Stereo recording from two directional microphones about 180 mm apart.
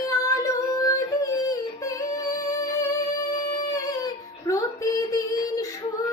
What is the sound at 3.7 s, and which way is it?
Child singing, 20° left (ahead or behind).